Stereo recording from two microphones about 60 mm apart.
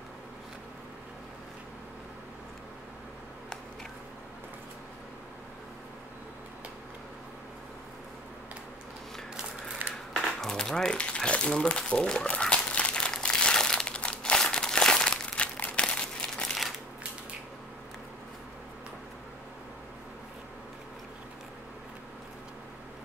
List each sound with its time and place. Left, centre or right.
10.2 s crumpling: centre
16.4 s crushing: centre